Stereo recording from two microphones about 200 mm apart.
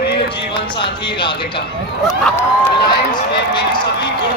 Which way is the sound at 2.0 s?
Centre (ahead or behind).